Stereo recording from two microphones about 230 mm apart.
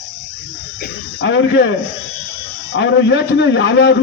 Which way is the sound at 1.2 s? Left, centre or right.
Left.